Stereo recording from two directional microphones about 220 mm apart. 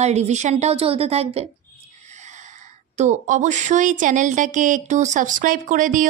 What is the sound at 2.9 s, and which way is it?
Speech, 30° right (ahead or behind).